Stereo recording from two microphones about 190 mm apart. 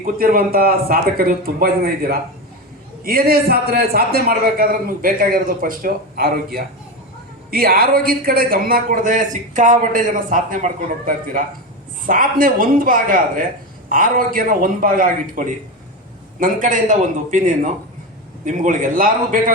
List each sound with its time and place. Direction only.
0.0 s a man's voice: 50° right (ahead or behind)